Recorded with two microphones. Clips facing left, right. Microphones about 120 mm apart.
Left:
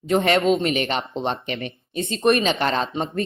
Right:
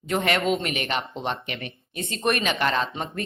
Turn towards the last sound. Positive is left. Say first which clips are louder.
# left 3 dB
turn(degrees=30)  # may be behind; listen again after turning